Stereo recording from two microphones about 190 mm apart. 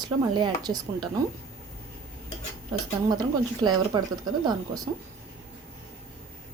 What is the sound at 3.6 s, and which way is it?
Speech, 20° right (ahead or behind).